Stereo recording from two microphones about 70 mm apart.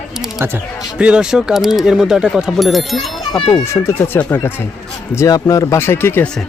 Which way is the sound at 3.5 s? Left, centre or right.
Left.